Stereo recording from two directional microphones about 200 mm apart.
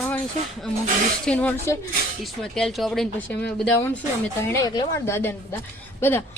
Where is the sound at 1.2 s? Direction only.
5° left (ahead or behind).